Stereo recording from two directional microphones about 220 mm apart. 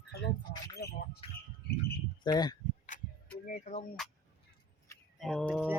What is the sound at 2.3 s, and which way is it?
Speech, 20° left (ahead or behind).